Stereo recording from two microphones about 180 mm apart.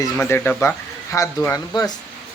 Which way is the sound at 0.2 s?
10° left (ahead or behind).